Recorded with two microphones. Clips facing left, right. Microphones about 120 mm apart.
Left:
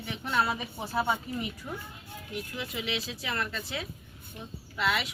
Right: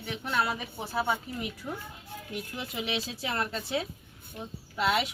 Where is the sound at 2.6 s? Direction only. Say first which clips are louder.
Right 1 dB; 30° right (ahead or behind).